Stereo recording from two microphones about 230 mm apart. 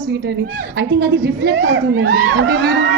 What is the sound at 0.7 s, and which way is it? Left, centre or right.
A woman's voice, right.